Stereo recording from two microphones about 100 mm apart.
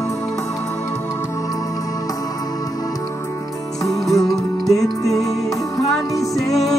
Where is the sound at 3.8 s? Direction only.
35° left (ahead or behind).